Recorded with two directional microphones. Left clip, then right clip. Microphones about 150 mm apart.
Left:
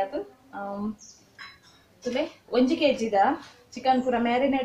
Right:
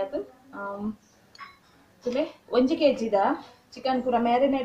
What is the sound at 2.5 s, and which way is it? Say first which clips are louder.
A woman's voice: right 1 dB; 10° right (ahead or behind).